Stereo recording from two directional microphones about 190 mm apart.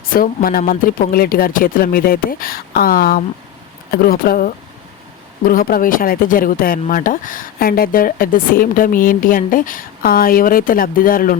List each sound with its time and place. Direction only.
0.0 s speech: 50° left (ahead or behind)